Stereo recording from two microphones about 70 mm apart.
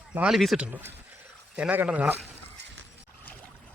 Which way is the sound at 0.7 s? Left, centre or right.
Right.